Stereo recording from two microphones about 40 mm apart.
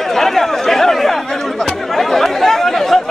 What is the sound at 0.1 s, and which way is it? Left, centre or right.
Chatter, centre.